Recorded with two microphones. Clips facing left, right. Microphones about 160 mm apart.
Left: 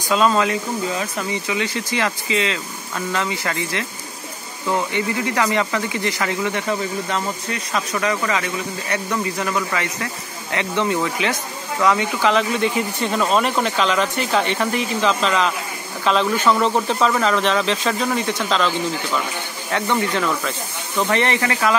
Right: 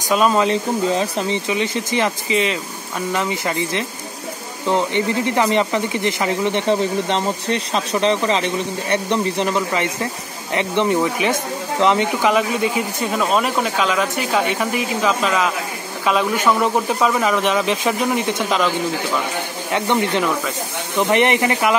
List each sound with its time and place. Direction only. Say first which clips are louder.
0.1 s speech: right 2 dB; 15° right (ahead or behind)
19.7 s speech: right 2 dB; 20° right (ahead or behind)